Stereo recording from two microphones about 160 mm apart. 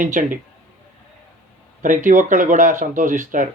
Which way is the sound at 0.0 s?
55° right (ahead or behind).